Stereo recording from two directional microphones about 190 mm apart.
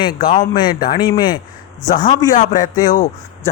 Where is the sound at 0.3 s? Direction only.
25° left (ahead or behind).